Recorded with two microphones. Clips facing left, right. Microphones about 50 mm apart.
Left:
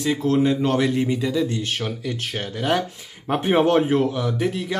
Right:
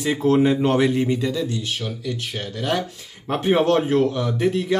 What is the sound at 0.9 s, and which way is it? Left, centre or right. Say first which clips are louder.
Speech: right 1 dB; centre.